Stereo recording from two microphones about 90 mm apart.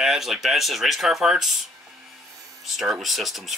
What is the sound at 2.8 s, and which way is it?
Speech, centre (ahead or behind).